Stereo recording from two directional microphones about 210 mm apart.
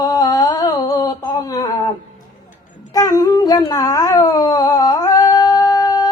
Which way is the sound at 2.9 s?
15° left (ahead or behind).